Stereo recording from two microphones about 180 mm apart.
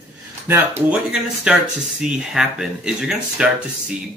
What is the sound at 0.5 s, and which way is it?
Speech, 10° right (ahead or behind).